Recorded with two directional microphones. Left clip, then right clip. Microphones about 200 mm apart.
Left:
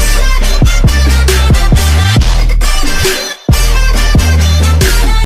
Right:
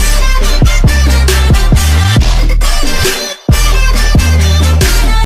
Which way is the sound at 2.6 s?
Centre (ahead or behind).